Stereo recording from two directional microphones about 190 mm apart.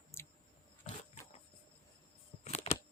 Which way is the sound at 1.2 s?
35° left (ahead or behind).